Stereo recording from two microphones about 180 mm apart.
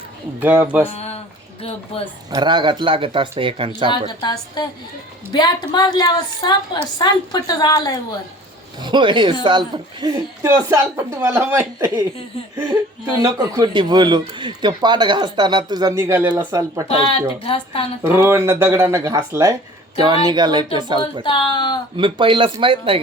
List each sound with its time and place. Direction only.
0.3 s speech: 10° right (ahead or behind)
0.9 s speech: 35° left (ahead or behind)
2.3 s speech: 25° right (ahead or behind)
4.2 s speech: 25° left (ahead or behind)
8.8 s speech: 25° right (ahead or behind)
10.4 s speech: 15° right (ahead or behind)
17.4 s a woman's voice: 30° left (ahead or behind)
18.0 s speech: 15° right (ahead or behind)
21.2 s speech: 25° left (ahead or behind)
21.9 s speech: 30° right (ahead or behind)